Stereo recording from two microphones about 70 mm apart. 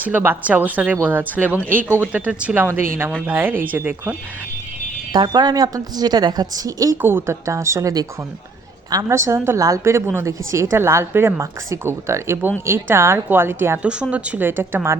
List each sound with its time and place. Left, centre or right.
0.0 s speech: right
2.6 s a woman's voice: right
5.1 s a woman's voice: right
6.9 s a woman's voice: right
7.4 s speech: right
9.0 s a woman's voice: right
9.6 s a woman's voice: right
11.3 s a woman's voice: right
13.8 s speech: centre
14.4 s a woman's voice: right